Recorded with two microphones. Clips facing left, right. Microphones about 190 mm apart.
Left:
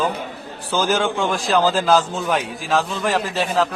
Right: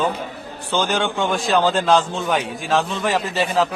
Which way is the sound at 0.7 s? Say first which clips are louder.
Left 1 dB; centre (ahead or behind).